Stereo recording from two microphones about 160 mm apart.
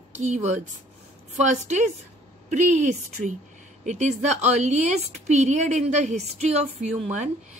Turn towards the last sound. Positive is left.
turn(degrees=-45)  # may be behind; listen again after turning